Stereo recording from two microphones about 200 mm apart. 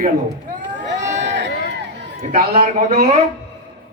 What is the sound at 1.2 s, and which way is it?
Run, 60° right (ahead or behind).